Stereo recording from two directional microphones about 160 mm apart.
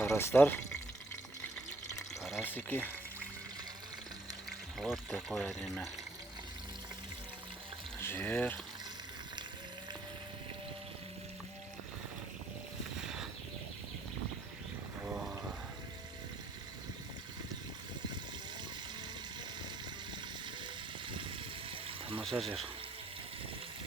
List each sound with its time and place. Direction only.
0.0 s speech: 15° left (ahead or behind)
2.4 s speech: 10° left (ahead or behind)
4.8 s speech: centre (ahead or behind)
8.0 s speech: 10° left (ahead or behind)
15.0 s a sound: 5° right (ahead or behind)
21.1 s a sound: 30° right (ahead or behind)
22.2 s water: centre (ahead or behind)